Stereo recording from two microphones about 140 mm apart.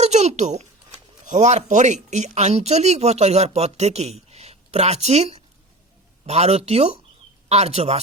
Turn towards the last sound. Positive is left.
turn(degrees=-50)  # may be behind; listen again after turning